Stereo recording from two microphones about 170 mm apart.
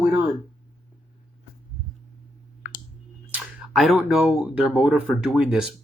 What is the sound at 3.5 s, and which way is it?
Speech, centre (ahead or behind).